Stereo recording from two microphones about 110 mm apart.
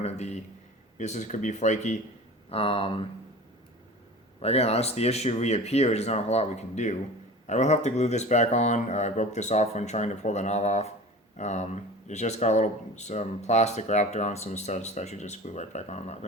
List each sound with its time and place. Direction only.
0.0 s a sound: 90° left
0.9 s speech: 90° left
2.5 s speech: 60° left (ahead or behind)
4.4 s speech: 70° left (ahead or behind); by 16.2 s 90° left